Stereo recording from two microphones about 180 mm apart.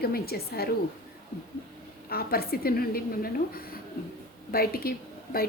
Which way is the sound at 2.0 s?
55° left (ahead or behind).